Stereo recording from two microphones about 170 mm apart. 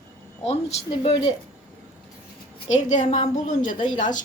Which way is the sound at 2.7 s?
45° left (ahead or behind).